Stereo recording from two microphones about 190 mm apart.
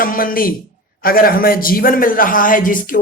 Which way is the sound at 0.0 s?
45° left (ahead or behind).